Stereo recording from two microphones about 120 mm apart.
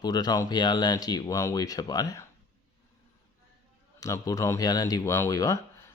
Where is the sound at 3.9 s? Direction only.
30° left (ahead or behind).